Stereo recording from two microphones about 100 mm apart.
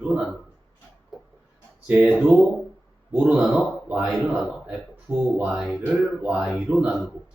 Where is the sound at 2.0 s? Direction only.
Centre (ahead or behind).